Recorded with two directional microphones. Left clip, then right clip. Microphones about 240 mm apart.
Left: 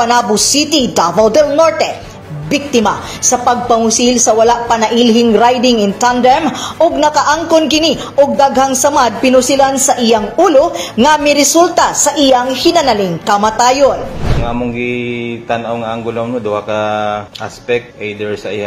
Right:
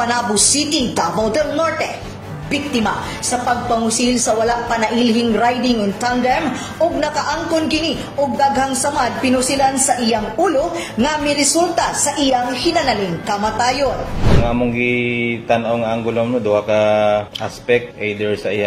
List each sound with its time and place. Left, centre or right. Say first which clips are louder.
0.0 s a woman's voice: left 6 dB; left
14.4 s speech: left 2 dB; centre